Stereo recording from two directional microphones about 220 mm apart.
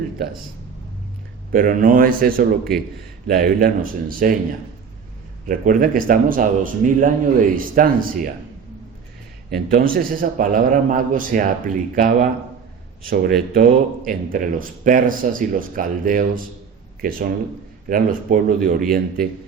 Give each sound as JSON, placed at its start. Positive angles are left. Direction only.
{"t": 1.5, "sound": "speech", "side_deg": -40}
{"t": 2.7, "sound": "a man's voice", "side_deg": 0}
{"t": 3.2, "sound": "speech", "side_deg": -40}
{"t": 5.5, "sound": "speech", "side_deg": -40}
{"t": 9.6, "sound": "a man's voice", "side_deg": -40}